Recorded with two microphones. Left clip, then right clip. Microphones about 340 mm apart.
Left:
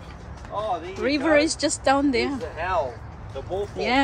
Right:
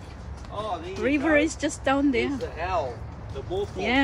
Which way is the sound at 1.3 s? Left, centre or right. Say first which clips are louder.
Left 3 dB; left.